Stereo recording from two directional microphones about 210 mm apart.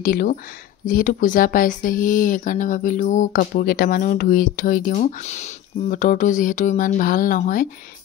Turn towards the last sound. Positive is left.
turn(degrees=40)  # may be behind; listen again after turning